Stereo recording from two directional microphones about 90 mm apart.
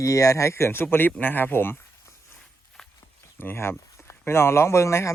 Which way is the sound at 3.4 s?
25° left (ahead or behind).